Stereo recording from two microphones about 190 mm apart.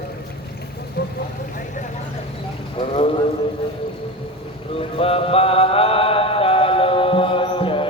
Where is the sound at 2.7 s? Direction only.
30° left (ahead or behind).